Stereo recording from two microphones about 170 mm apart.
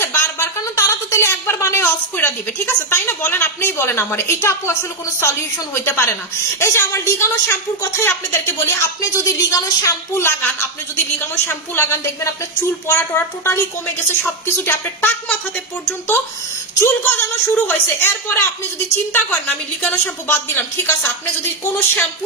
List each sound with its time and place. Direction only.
0.0 s speech: 15° left (ahead or behind)
5.8 s a woman's voice: 15° left (ahead or behind)
16.8 s a woman's voice: 10° left (ahead or behind)